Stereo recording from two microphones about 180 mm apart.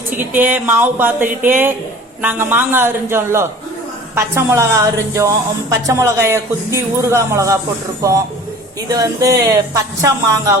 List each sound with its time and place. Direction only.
0.2 s a woman's voice: 10° right (ahead or behind)
9.0 s a woman's voice: 20° right (ahead or behind)